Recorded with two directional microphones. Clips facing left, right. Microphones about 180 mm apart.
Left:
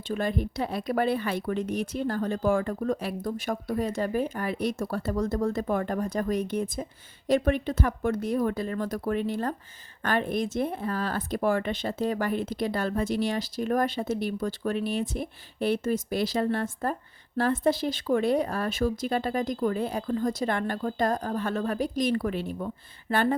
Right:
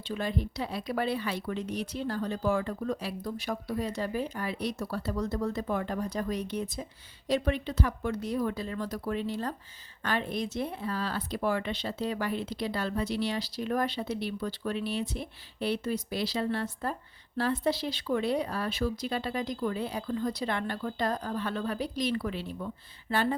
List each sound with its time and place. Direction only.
0.1 s speech: 50° left (ahead or behind)